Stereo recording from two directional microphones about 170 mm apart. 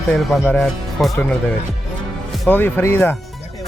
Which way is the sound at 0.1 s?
5° left (ahead or behind).